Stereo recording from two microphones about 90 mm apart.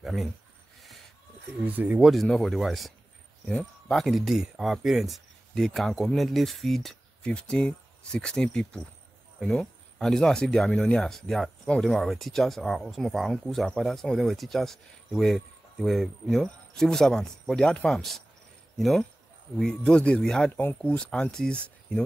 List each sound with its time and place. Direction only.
0.0 s speech: centre (ahead or behind)
1.7 s speech: 20° right (ahead or behind)
2.0 s speech: 5° left (ahead or behind)
3.9 s speech: centre (ahead or behind)